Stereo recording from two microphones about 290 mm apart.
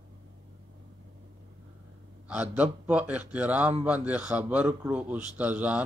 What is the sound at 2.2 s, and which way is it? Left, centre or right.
A man's voice, centre.